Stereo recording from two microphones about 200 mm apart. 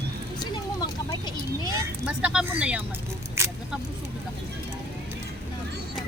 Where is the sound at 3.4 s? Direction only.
15° right (ahead or behind).